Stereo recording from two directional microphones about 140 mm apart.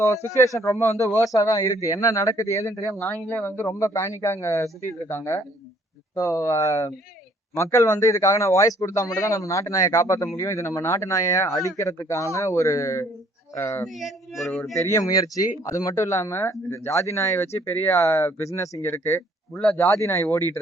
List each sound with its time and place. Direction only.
0.0 s speech: 20° left (ahead or behind)
13.8 s speech: centre (ahead or behind)
14.8 s speech: 25° left (ahead or behind)